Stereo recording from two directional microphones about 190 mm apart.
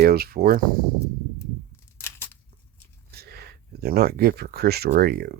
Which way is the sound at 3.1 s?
55° right (ahead or behind).